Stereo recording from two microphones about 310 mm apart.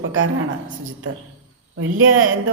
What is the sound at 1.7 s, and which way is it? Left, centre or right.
Speech, right.